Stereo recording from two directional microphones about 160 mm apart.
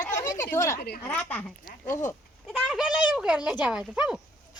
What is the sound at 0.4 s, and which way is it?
Speech, 20° left (ahead or behind).